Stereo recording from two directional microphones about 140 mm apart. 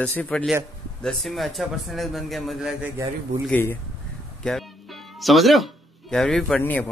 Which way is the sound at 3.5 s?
15° left (ahead or behind).